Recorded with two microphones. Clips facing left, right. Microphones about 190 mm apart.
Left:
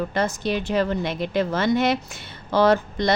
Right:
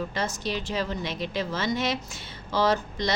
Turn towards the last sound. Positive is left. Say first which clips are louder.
# left 6 dB
turn(degrees=55)  # may be behind; listen again after turning